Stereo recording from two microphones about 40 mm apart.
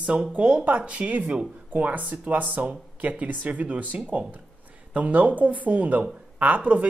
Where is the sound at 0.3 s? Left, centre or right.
Right.